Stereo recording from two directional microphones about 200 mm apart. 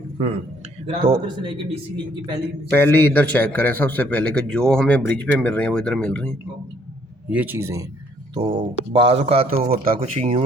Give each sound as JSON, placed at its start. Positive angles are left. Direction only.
{"t": 0.9, "sound": "speech", "side_deg": -25}
{"t": 2.6, "sound": "a man's voice", "side_deg": 10}
{"t": 7.3, "sound": "a man's voice", "side_deg": -10}
{"t": 9.6, "sound": "speech", "side_deg": -45}
{"t": 10.0, "sound": "speech", "side_deg": -30}